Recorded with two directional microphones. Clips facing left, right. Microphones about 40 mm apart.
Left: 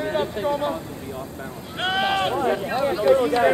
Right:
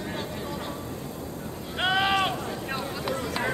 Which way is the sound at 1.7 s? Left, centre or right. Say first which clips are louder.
Left 1 dB; centre.